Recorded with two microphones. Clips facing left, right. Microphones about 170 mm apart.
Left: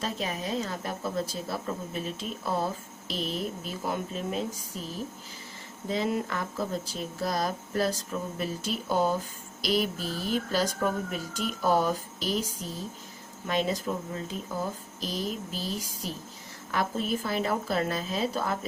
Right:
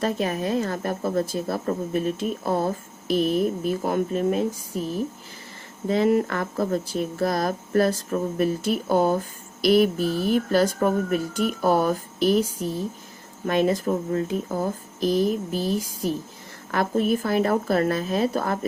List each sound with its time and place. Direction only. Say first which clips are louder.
0.0 s speech: right 8 dB; 55° right (ahead or behind)